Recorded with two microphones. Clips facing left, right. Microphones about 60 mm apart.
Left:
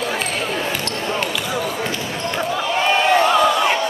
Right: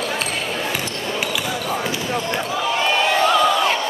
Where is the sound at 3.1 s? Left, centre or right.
Centre.